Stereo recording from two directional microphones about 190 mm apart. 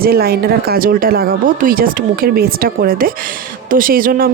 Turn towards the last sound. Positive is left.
turn(degrees=-50)  # may be behind; listen again after turning